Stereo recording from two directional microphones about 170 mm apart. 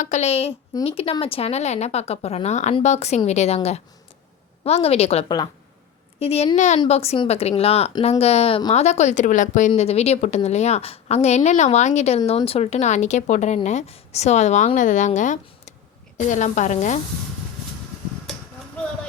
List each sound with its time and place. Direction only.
0.0 s a woman's voice: 45° left (ahead or behind)